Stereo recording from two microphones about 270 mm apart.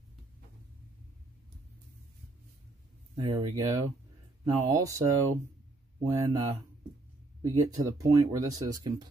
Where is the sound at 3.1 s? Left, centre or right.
Centre.